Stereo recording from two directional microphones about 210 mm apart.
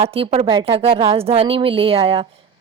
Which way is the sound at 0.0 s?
30° right (ahead or behind).